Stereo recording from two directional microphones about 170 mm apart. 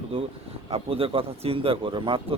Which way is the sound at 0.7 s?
35° right (ahead or behind).